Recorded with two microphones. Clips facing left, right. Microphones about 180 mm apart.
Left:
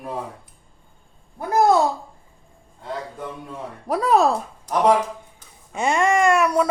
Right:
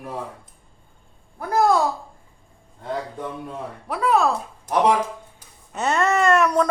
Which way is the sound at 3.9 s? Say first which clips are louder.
Left 2 dB; 40° left (ahead or behind).